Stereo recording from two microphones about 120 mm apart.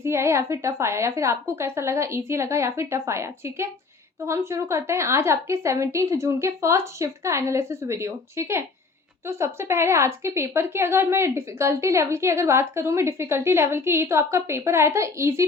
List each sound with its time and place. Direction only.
0.0 s a woman's voice: 20° right (ahead or behind)